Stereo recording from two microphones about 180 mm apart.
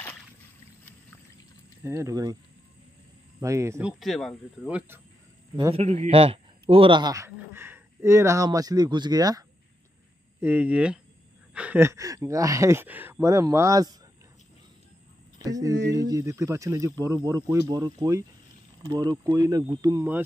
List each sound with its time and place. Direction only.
1.8 s speech: 15° right (ahead or behind)
3.3 s speech: 15° right (ahead or behind)
4.0 s speech: centre (ahead or behind)
4.6 s speech: 10° right (ahead or behind)
5.6 s a man's voice: 35° right (ahead or behind)
10.4 s speech: 10° right (ahead or behind)
15.3 s speech: 20° right (ahead or behind)
15.7 s a sound: 80° right
16.0 s speech: 20° right (ahead or behind)